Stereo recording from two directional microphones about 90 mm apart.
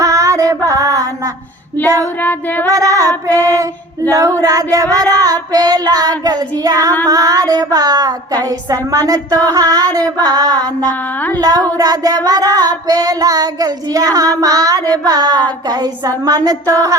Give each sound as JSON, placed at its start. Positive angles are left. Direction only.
{"t": 0.0, "sound": "female singing", "side_deg": -40}
{"t": 2.2, "sound": "female singing", "side_deg": 20}
{"t": 2.6, "sound": "child singing", "side_deg": -40}
{"t": 3.4, "sound": "music", "side_deg": -40}
{"t": 4.1, "sound": "child singing", "side_deg": -40}